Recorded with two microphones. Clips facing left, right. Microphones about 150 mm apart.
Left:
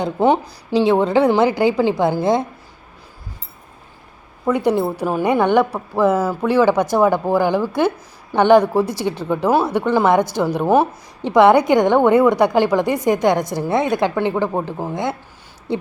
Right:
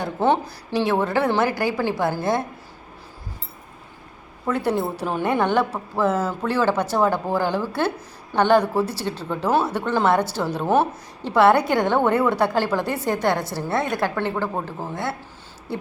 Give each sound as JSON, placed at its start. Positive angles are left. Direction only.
{"t": 0.0, "sound": "a woman's voice", "side_deg": 15}
{"t": 4.4, "sound": "a woman's voice", "side_deg": 10}
{"t": 15.7, "sound": "owl", "side_deg": 20}